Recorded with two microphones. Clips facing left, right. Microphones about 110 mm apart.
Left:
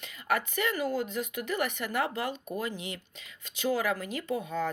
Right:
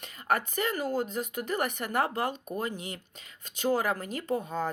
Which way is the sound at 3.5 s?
45° right (ahead or behind).